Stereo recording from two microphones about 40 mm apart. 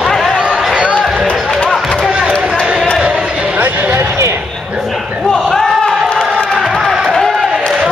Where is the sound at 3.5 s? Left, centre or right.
Right.